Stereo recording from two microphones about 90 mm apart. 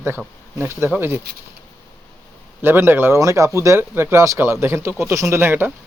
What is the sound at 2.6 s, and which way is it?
Speech, 25° right (ahead or behind).